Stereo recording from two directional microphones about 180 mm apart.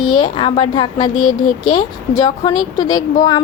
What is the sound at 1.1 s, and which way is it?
Speech, 50° left (ahead or behind).